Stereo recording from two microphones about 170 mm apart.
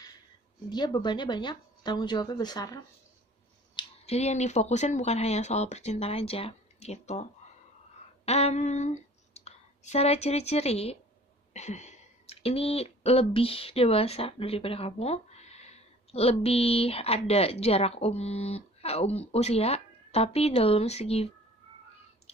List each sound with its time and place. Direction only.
0.7 s a woman's voice: 25° left (ahead or behind)
3.7 s speech: 40° left (ahead or behind)
8.3 s speech: 40° left (ahead or behind)